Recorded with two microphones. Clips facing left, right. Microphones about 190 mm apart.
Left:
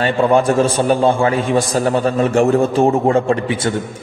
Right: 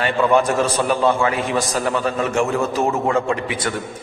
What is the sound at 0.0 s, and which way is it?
A man's voice, 30° left (ahead or behind).